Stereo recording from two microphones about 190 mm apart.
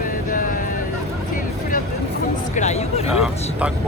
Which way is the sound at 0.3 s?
45° left (ahead or behind).